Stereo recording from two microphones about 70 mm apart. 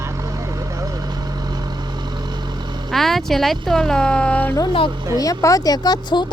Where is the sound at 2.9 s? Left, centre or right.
Centre; by 4.6 s left.